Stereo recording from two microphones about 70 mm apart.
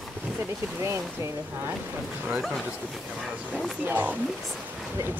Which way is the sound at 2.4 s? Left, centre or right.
Centre.